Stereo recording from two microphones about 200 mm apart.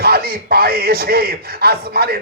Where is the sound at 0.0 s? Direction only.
50° right (ahead or behind).